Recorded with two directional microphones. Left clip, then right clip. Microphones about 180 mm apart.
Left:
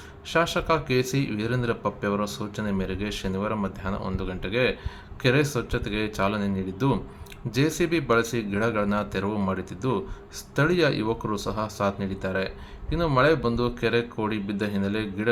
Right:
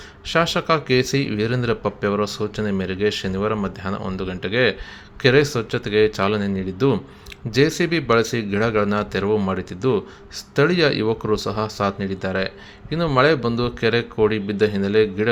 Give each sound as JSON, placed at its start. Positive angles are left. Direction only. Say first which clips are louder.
{"t": 0.3, "sound": "a man's voice", "louder": "right 4 dB", "side_deg": -25}